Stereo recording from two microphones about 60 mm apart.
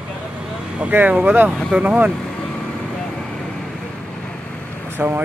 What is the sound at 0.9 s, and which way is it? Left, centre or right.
Speech, right.